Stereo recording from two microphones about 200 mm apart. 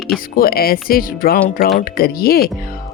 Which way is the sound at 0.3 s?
50° left (ahead or behind).